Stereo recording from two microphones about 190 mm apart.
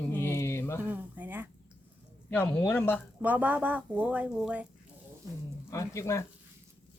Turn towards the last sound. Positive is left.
turn(degrees=15)  # may be behind; listen again after turning